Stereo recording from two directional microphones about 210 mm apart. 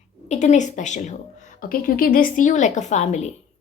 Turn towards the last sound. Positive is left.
turn(degrees=35)  # may be behind; listen again after turning